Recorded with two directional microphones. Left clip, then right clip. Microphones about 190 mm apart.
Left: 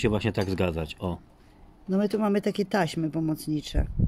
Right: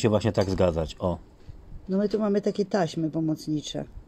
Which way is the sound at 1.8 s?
35° left (ahead or behind).